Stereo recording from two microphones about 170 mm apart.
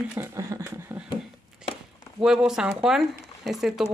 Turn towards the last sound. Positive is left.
turn(degrees=0)  # may be behind; listen again after turning